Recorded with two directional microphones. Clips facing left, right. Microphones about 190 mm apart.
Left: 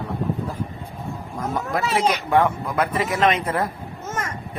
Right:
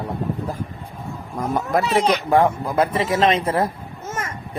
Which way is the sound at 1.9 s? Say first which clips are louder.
Right 1 dB; 35° right (ahead or behind).